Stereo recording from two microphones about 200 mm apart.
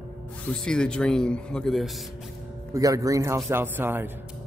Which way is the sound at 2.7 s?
15° right (ahead or behind).